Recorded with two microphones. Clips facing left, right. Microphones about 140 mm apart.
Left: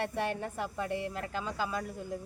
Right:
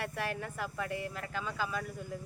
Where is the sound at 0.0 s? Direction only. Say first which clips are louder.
Left 4 dB; 25° left (ahead or behind).